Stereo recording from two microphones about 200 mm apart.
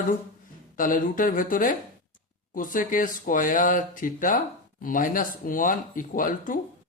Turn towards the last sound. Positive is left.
turn(degrees=40)  # may be behind; listen again after turning